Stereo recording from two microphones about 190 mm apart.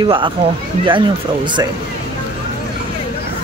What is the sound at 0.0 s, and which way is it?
Speech, 25° right (ahead or behind).